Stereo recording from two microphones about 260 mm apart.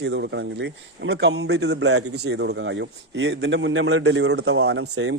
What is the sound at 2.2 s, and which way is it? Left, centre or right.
A man's voice, right.